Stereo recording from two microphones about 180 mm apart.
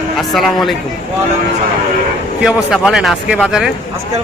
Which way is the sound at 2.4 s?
5° right (ahead or behind).